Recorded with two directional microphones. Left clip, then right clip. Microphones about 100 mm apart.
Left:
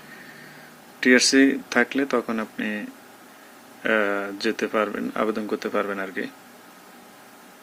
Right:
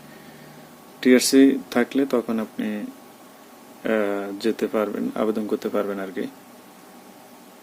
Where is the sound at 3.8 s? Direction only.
20° right (ahead or behind).